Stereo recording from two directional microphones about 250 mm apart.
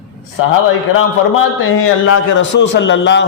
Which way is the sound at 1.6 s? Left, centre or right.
Left.